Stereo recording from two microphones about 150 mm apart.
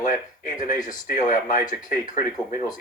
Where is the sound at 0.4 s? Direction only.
60° left (ahead or behind).